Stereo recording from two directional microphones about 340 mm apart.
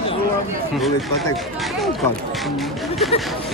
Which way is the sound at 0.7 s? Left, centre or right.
Centre.